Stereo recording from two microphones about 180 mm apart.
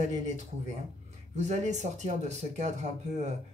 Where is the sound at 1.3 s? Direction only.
40° right (ahead or behind).